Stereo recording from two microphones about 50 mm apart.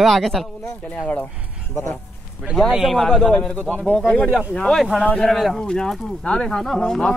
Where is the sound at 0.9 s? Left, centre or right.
Left.